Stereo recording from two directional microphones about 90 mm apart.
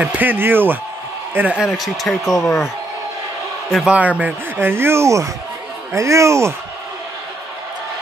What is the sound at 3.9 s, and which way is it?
Speech, 15° right (ahead or behind).